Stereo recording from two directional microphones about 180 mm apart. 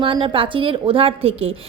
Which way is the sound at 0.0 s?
30° right (ahead or behind).